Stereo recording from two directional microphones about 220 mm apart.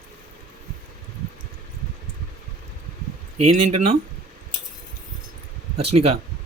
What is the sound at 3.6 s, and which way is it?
Speech, 30° right (ahead or behind).